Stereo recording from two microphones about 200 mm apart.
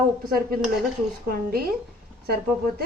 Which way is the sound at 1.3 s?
50° right (ahead or behind).